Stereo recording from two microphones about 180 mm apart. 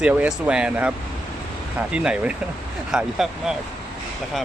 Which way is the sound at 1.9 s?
5° right (ahead or behind).